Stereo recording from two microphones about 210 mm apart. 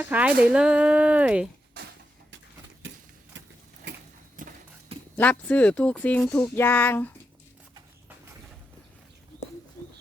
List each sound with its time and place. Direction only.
0.0 s speech: 5° right (ahead or behind)
2.8 s a sound: 60° right (ahead or behind)
4.4 s clip-clop: 40° right (ahead or behind)
5.1 s speech: 5° left (ahead or behind)